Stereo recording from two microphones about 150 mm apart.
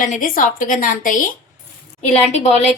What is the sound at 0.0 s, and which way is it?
A woman's voice, 60° left (ahead or behind).